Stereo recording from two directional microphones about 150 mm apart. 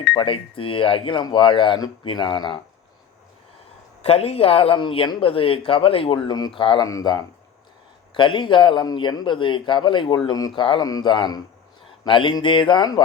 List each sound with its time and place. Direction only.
0.1 s speech: 35° left (ahead or behind)
4.0 s speech: 40° left (ahead or behind)